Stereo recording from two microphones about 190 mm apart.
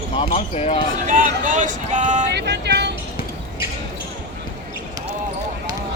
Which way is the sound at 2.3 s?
65° right (ahead or behind).